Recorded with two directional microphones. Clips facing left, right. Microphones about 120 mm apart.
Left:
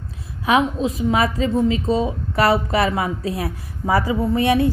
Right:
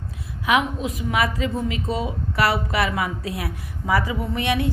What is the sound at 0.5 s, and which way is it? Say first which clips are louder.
A woman's voice: left 3 dB; 30° left (ahead or behind).